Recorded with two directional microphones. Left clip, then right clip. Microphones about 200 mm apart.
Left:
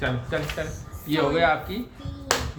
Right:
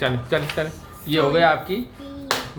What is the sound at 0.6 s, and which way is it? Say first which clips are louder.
Speech: right 6 dB; 40° right (ahead or behind).